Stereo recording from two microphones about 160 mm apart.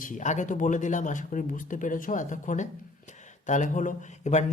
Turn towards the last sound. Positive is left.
turn(degrees=45)  # may be behind; listen again after turning